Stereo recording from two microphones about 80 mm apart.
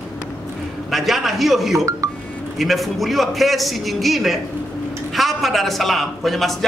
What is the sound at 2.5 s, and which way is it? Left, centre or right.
Speech, centre.